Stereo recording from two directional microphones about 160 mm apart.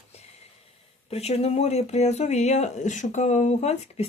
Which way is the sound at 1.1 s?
40° left (ahead or behind).